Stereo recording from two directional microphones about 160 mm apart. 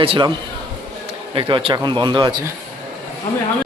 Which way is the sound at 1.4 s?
30° right (ahead or behind).